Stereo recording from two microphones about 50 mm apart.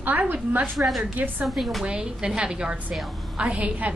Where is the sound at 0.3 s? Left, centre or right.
Right.